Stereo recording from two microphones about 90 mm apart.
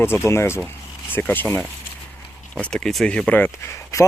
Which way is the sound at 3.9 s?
35° left (ahead or behind).